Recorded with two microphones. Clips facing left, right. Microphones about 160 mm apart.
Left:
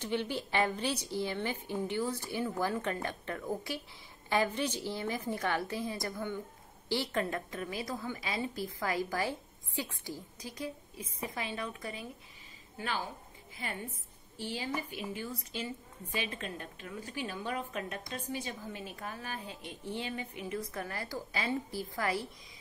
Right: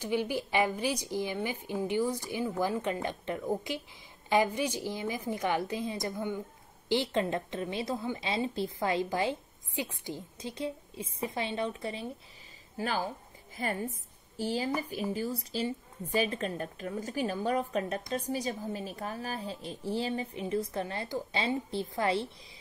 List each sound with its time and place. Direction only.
0.0 s a woman's voice: 10° right (ahead or behind); by 12.1 s 30° right (ahead or behind)
12.7 s a woman's voice: 40° right (ahead or behind); by 22.3 s 25° right (ahead or behind)